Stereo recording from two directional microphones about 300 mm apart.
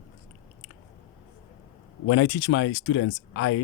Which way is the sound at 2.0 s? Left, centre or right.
Left.